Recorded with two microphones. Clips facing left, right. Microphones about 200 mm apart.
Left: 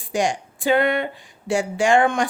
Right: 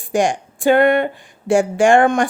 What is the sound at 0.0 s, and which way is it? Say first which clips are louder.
Speech: right 5 dB; 50° right (ahead or behind).